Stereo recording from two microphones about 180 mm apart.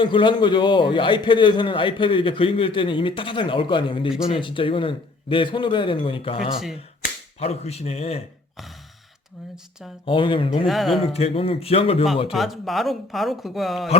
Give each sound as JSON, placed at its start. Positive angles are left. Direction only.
{"t": 0.0, "sound": "a man's voice", "side_deg": 25}
{"t": 10.1, "sound": "a man's voice", "side_deg": 30}
{"t": 10.7, "sound": "speech", "side_deg": 0}
{"t": 11.0, "sound": "a man's voice", "side_deg": 35}
{"t": 12.3, "sound": "speech", "side_deg": 0}